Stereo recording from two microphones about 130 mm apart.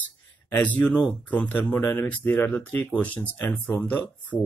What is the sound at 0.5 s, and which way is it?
Speech, 10° left (ahead or behind).